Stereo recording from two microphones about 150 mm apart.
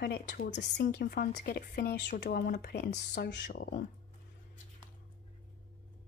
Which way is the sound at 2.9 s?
60° left (ahead or behind).